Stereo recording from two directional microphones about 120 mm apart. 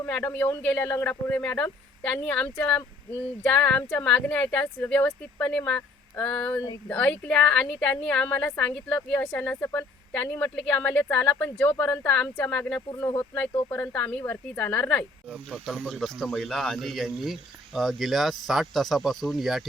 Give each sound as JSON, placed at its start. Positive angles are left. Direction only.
{"t": 0.0, "sound": "a woman's voice", "side_deg": 15}
{"t": 13.0, "sound": "a woman's voice", "side_deg": 25}
{"t": 15.3, "sound": "speech", "side_deg": 0}